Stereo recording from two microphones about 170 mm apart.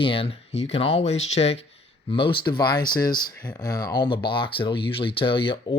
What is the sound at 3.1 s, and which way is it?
Speech, 55° left (ahead or behind).